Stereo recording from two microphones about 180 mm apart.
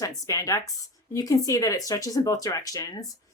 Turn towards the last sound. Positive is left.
turn(degrees=20)  # may be behind; listen again after turning